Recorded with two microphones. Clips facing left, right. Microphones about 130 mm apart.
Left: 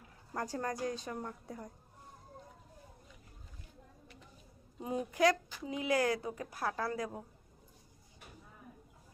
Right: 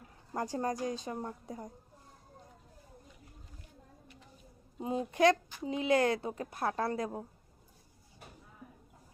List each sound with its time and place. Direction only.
0.3 s speech: 20° right (ahead or behind)
4.8 s speech: 25° right (ahead or behind)